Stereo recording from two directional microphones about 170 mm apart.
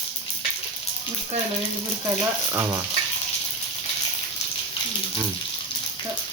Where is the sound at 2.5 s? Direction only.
20° right (ahead or behind).